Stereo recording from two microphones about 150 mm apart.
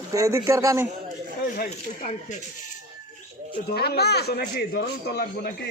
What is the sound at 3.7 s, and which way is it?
A man's voice, 90° left.